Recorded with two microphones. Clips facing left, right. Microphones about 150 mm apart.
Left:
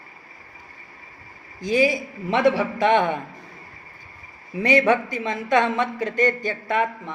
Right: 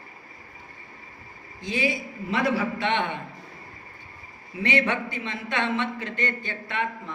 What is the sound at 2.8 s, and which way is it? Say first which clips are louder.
Speech: left 7 dB; 40° left (ahead or behind).